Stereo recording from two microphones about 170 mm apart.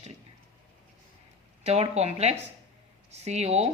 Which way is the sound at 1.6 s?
40° right (ahead or behind).